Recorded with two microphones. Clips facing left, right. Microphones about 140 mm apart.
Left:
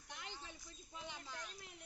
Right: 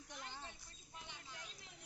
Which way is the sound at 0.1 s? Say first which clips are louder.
Left 1 dB; 80° left.